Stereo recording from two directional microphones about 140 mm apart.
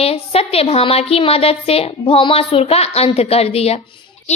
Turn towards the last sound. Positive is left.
turn(degrees=45)  # may be behind; listen again after turning